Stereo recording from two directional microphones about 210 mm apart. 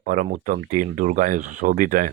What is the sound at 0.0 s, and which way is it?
Speech, 40° right (ahead or behind).